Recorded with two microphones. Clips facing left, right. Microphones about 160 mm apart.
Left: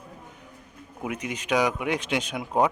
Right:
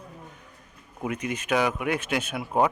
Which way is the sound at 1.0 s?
10° left (ahead or behind).